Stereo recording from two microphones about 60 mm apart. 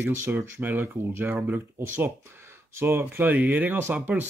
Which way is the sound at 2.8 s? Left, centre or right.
Right.